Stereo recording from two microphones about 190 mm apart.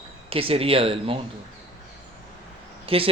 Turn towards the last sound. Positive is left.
turn(degrees=-30)  # may be behind; listen again after turning